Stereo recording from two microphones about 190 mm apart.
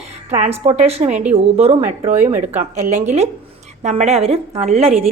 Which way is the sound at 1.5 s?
35° right (ahead or behind).